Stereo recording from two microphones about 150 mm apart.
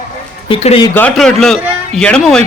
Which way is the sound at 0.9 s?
10° left (ahead or behind).